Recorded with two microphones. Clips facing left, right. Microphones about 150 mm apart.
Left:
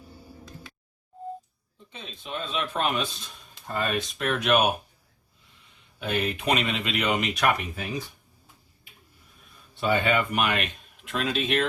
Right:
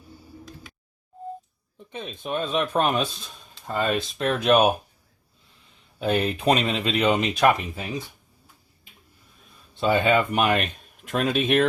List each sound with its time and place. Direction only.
1.9 s speech: 55° right (ahead or behind)
3.8 s speech: 30° right (ahead or behind)
6.0 s speech: 35° right (ahead or behind)
9.8 s speech: 30° right (ahead or behind)
11.1 s speech: 50° right (ahead or behind)